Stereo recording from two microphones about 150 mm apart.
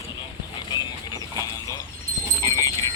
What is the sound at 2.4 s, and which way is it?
Horse, 25° left (ahead or behind).